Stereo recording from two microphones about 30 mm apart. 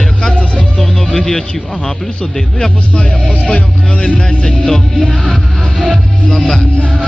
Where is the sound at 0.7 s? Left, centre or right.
Centre.